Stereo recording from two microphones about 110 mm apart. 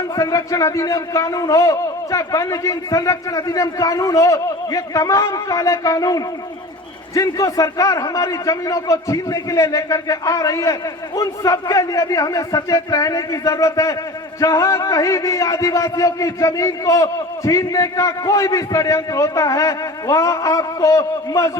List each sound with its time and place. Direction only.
0.2 s speech: 35° left (ahead or behind)